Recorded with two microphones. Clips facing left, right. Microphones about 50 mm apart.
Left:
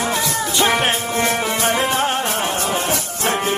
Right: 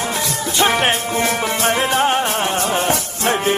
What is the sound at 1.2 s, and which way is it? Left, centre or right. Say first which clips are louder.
Music: even; centre.